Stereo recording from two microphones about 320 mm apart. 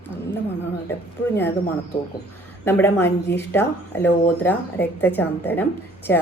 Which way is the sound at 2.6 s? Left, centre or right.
Centre.